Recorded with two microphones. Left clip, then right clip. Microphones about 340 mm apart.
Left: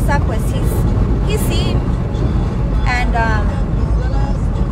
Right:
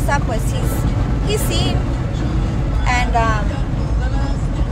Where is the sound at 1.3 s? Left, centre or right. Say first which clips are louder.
Right 1 dB; centre.